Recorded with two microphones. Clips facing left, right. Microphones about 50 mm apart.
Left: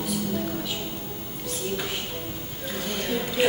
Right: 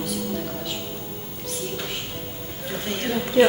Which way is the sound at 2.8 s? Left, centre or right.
Right.